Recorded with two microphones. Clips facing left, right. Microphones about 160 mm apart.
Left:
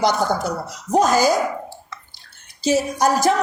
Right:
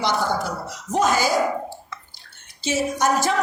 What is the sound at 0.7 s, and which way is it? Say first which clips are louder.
Speech: left 4 dB; 35° left (ahead or behind).